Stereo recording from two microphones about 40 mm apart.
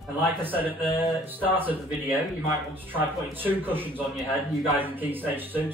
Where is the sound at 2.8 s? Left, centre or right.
Right.